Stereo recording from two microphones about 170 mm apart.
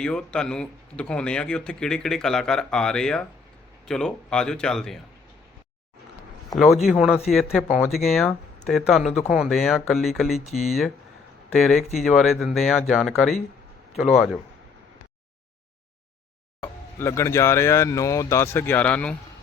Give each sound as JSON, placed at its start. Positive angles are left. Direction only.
{"t": 0.0, "sound": "speech", "side_deg": 5}
{"t": 6.5, "sound": "speech", "side_deg": 0}
{"t": 10.4, "sound": "speech", "side_deg": 40}
{"t": 10.7, "sound": "speech", "side_deg": 0}
{"t": 11.9, "sound": "speech", "side_deg": 0}
{"t": 16.6, "sound": "speech", "side_deg": 15}